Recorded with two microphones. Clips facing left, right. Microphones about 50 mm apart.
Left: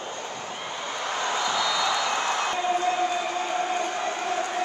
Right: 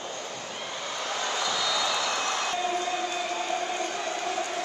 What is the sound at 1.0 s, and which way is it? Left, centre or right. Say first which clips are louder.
Vehicle: left 3 dB; left.